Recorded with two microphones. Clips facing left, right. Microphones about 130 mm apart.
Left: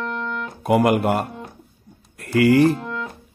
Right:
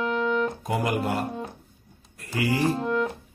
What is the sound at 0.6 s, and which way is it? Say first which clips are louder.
A man's voice: left 9 dB; 65° left (ahead or behind).